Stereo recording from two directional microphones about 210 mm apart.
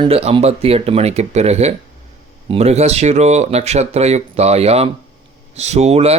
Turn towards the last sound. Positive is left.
turn(degrees=-30)  # may be behind; listen again after turning